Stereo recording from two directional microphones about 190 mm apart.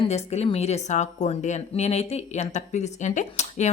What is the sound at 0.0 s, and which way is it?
Speech, 35° left (ahead or behind).